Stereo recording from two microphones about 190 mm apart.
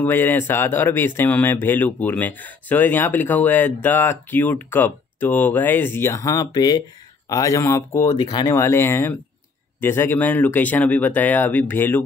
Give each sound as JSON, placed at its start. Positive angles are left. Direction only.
{"t": 0.0, "sound": "speech", "side_deg": 10}